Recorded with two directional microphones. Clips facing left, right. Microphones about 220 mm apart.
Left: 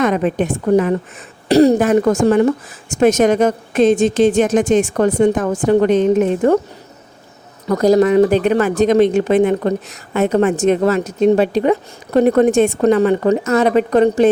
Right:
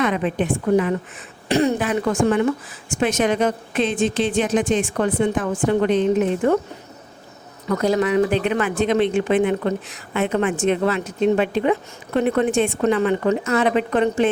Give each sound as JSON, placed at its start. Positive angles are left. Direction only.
{"t": 0.0, "sound": "speech", "side_deg": 45}
{"t": 7.7, "sound": "speech", "side_deg": 40}